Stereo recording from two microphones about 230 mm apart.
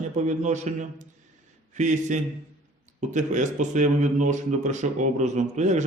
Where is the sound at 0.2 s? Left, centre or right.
Right.